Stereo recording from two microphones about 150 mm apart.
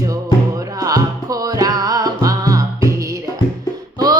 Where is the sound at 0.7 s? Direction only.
25° right (ahead or behind).